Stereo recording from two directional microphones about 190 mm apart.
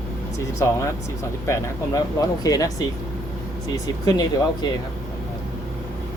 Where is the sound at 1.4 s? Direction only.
15° left (ahead or behind).